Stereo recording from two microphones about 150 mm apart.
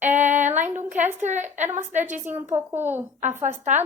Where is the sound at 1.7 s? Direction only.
55° right (ahead or behind).